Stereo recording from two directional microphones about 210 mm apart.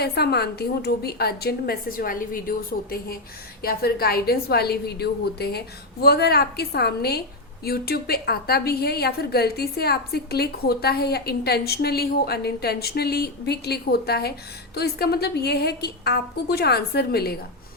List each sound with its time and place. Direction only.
0.0 s a woman's voice: 50° left (ahead or behind)